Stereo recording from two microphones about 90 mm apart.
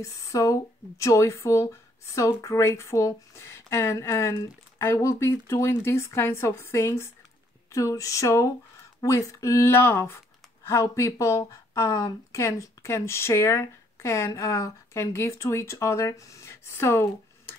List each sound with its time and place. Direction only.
0.0 s speech: 35° left (ahead or behind)